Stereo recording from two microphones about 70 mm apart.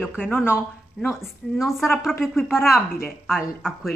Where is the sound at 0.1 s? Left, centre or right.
Left.